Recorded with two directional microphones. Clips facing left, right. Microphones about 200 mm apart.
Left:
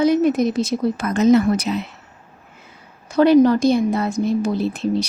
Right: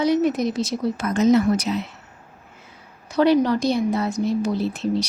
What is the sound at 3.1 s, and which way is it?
Speech, 50° left (ahead or behind).